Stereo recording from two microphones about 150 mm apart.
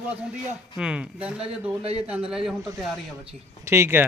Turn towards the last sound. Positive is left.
turn(degrees=-15)  # may be behind; listen again after turning